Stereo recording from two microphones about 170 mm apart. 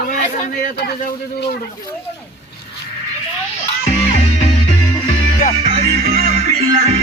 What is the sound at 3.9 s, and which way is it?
Music, 40° left (ahead or behind).